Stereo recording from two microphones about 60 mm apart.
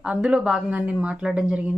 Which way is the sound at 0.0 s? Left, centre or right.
Centre.